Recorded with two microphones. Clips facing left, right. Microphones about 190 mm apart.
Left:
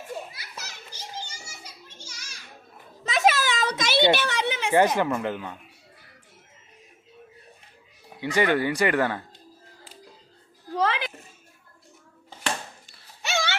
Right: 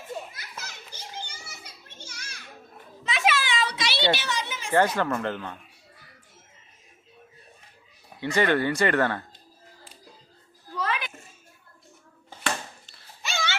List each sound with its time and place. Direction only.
0.3 s children playing: 50° right (ahead or behind)
3.0 s children playing: 40° left (ahead or behind)
4.1 s speech: 55° left (ahead or behind)
4.9 s speech: 10° left (ahead or behind)
8.2 s speech: 15° left (ahead or behind)
10.8 s a sound: 90° left
13.2 s dog: 70° left (ahead or behind)